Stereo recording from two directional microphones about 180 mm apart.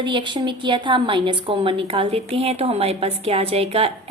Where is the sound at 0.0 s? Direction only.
25° right (ahead or behind).